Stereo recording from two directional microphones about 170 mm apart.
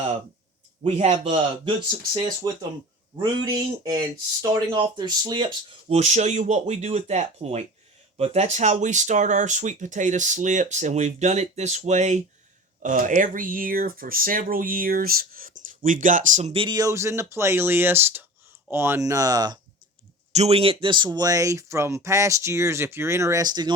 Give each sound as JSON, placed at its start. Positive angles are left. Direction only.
{"t": 0.9, "sound": "speech", "side_deg": -40}
{"t": 2.1, "sound": "speech", "side_deg": -25}
{"t": 5.9, "sound": "speech", "side_deg": -40}
{"t": 20.3, "sound": "speech", "side_deg": -40}